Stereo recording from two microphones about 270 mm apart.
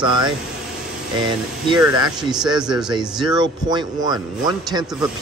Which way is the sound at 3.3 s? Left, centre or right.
Centre.